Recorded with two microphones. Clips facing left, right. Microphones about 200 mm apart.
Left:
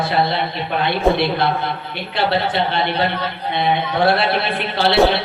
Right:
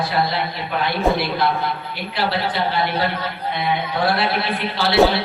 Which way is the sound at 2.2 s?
25° left (ahead or behind).